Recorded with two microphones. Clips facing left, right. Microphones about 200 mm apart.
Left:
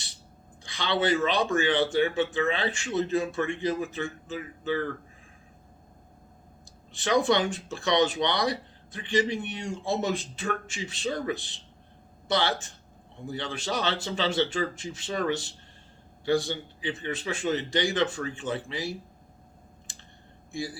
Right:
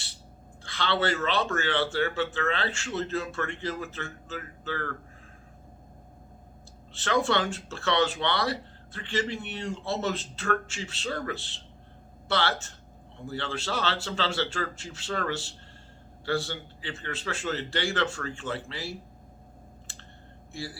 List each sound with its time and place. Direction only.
0.6 s speech: 15° left (ahead or behind)
6.9 s speech: 15° left (ahead or behind)
20.5 s speech: 15° left (ahead or behind)